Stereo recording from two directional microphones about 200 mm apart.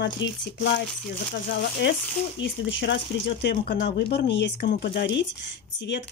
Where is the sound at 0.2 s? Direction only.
65° left (ahead or behind).